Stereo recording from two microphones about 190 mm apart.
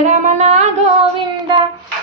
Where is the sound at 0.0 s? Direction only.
40° right (ahead or behind).